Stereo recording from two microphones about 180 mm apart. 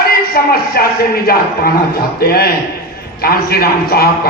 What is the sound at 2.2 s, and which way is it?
A man's voice, 60° left (ahead or behind).